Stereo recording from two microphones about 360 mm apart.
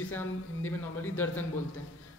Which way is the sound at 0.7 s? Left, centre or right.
Centre.